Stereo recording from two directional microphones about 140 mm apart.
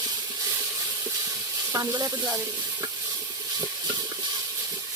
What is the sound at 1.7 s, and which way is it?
Speech, 25° right (ahead or behind).